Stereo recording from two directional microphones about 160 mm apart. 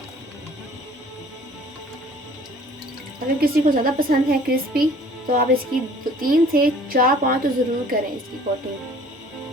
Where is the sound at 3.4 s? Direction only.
65° right (ahead or behind).